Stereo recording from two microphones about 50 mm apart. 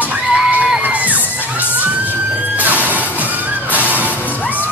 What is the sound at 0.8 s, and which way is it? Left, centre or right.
Children shouting, right.